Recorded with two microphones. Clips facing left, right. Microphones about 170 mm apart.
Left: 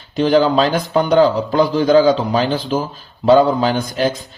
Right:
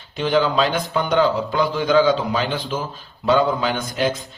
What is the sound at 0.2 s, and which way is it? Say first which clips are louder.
Speech: left 5 dB; 40° left (ahead or behind).